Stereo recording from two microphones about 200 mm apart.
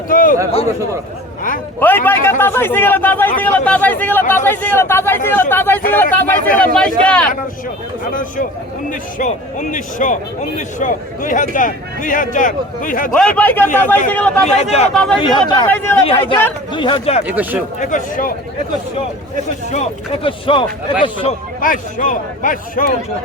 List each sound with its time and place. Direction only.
0.1 s a sound: 45° left (ahead or behind)
1.8 s speech: 10° left (ahead or behind)
8.1 s speech: 40° left (ahead or behind)
13.1 s speech: 5° left (ahead or behind)
14.4 s speech: 30° left (ahead or behind)
15.6 s speech: 10° left (ahead or behind)
16.0 s speech: 30° left (ahead or behind)
17.2 s speech: 5° right (ahead or behind)
17.7 s speech: 40° left (ahead or behind)
19.7 s speech: 30° left (ahead or behind)
21.6 s speech: 40° left (ahead or behind)